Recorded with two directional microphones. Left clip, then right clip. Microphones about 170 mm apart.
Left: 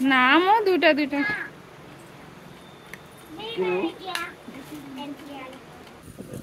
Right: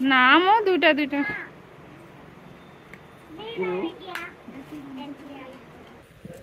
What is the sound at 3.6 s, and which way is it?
Children playing, 15° left (ahead or behind).